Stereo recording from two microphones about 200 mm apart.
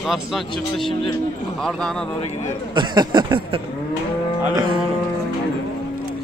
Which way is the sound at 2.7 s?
20° right (ahead or behind).